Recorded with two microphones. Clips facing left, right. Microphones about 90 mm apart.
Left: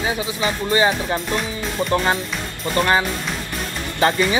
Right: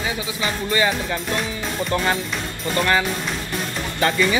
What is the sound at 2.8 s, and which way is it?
Speech, 25° left (ahead or behind).